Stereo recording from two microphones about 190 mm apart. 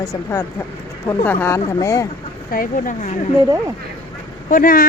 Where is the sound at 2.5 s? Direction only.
45° left (ahead or behind).